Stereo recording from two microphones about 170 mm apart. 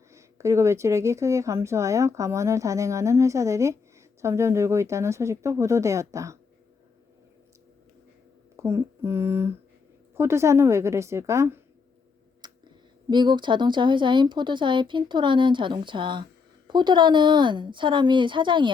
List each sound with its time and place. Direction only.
0.1 s a woman's voice: 15° right (ahead or behind)
8.5 s a woman's voice: 15° right (ahead or behind)
12.4 s clicking: 25° right (ahead or behind)
13.1 s speech: 25° right (ahead or behind)